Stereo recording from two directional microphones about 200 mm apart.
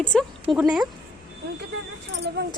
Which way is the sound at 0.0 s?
5° left (ahead or behind).